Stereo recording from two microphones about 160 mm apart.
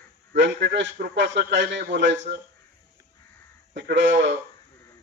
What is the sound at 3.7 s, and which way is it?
Speech, 90° right.